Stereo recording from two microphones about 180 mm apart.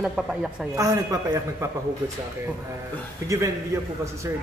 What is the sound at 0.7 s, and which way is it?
Speech, 20° right (ahead or behind).